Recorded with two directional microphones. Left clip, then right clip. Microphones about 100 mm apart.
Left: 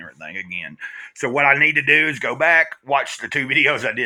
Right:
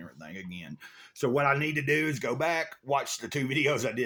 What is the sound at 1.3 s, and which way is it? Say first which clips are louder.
Speech: left 10 dB; 5° right (ahead or behind).